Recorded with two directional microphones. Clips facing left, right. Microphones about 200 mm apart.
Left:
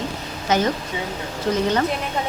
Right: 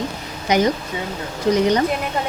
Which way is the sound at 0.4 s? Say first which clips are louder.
Right 3 dB; 15° right (ahead or behind).